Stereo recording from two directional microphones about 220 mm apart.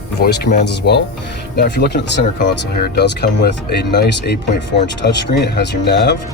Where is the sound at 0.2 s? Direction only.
50° left (ahead or behind).